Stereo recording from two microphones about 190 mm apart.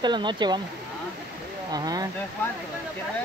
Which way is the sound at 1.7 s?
20° right (ahead or behind).